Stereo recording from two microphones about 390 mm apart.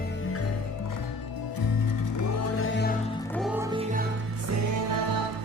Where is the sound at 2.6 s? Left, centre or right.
Left.